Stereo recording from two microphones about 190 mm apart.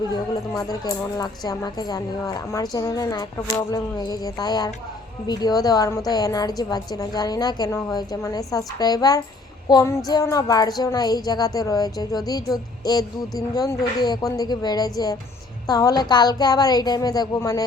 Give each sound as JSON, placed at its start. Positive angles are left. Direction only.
{"t": 0.1, "sound": "child singing", "side_deg": 20}